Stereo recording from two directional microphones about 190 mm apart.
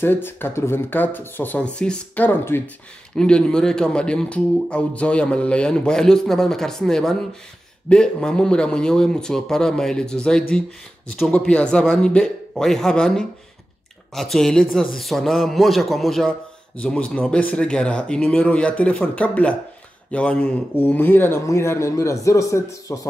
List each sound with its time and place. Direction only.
0.0 s a man's voice: 10° left (ahead or behind)